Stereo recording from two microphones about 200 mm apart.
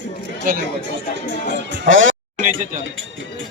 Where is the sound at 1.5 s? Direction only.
65° right (ahead or behind).